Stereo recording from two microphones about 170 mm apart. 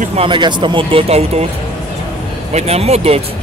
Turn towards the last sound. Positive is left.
turn(degrees=-35)  # may be behind; listen again after turning